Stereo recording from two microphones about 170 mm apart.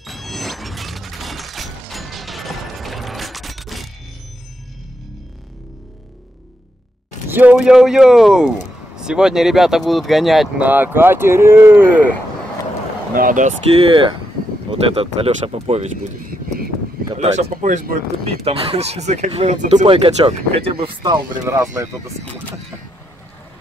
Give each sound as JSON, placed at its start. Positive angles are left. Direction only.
{"t": 0.0, "sound": "shatter", "side_deg": 0}
{"t": 7.2, "sound": "a sound", "side_deg": -10}
{"t": 7.5, "sound": "speech", "side_deg": -5}
{"t": 13.1, "sound": "speech", "side_deg": -55}
{"t": 14.7, "sound": "speech", "side_deg": -35}
{"t": 17.2, "sound": "speech", "side_deg": -40}
{"t": 18.4, "sound": "speech", "side_deg": -35}
{"t": 19.9, "sound": "speech", "side_deg": -35}